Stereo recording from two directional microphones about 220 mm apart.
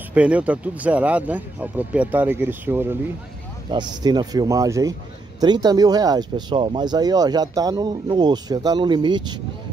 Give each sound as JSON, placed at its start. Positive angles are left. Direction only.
{"t": 0.1, "sound": "speech", "side_deg": -5}